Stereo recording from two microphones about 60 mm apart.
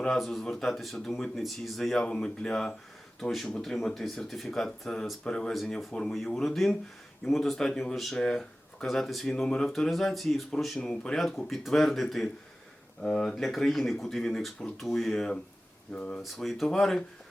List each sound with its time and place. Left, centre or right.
0.1 s speech: centre
9.9 s speech: centre
15.9 s speech: centre
16.2 s speech: centre